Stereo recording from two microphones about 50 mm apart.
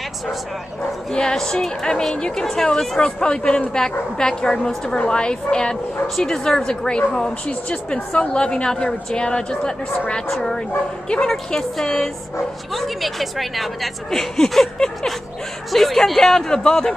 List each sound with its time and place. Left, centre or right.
1.1 s a woman's voice: centre
12.7 s a woman's voice: centre